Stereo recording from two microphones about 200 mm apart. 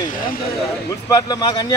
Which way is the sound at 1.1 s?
20° left (ahead or behind).